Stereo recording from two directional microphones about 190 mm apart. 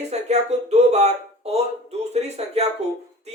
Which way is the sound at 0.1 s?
35° right (ahead or behind).